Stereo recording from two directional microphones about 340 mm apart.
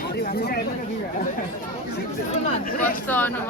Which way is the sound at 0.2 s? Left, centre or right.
Left.